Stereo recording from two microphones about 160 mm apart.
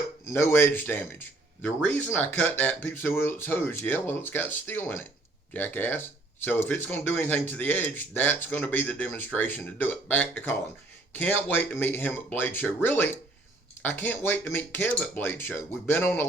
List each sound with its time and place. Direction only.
0.3 s speech: 15° left (ahead or behind)